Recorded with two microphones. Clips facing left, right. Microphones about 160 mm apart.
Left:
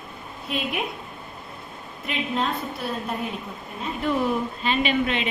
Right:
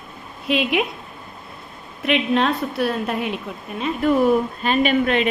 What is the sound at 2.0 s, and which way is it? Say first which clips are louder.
A woman's voice: right 8 dB; 75° right (ahead or behind).